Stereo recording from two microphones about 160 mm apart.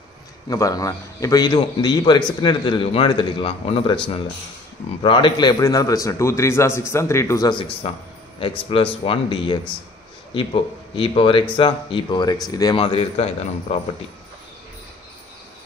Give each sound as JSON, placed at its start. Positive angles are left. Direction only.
{"t": 0.5, "sound": "a man's voice", "side_deg": 20}
{"t": 5.0, "sound": "a man's voice", "side_deg": 30}